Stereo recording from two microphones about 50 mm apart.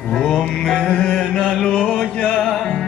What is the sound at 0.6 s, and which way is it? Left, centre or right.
Music, centre.